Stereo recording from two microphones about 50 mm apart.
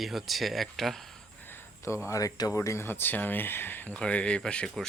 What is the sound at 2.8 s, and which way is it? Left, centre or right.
Speech, left.